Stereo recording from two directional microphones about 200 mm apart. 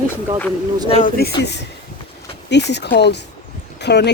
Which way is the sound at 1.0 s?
55° left (ahead or behind).